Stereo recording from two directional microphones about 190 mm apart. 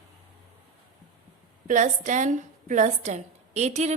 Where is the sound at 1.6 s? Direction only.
40° right (ahead or behind).